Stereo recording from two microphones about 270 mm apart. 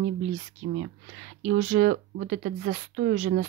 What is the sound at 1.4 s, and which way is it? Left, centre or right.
Speech, right.